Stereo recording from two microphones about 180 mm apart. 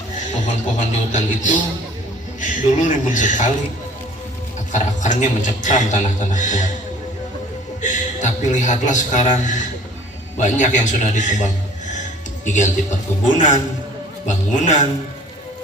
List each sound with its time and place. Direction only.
0.4 s a man's voice: 45° left (ahead or behind)
4.7 s a man's voice: 45° left (ahead or behind)
7.8 s a man's voice: 45° left (ahead or behind)